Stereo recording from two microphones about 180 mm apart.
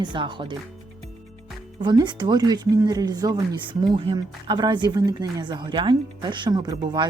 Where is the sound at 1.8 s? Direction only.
25° right (ahead or behind).